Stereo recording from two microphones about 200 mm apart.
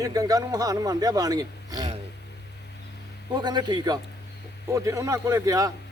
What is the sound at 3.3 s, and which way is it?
Speech, 20° right (ahead or behind).